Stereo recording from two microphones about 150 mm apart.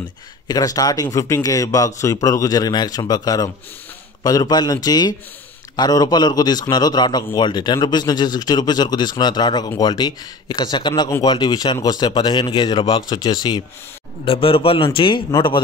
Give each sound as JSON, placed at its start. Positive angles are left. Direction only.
{"t": 0.5, "sound": "a man's voice", "side_deg": 25}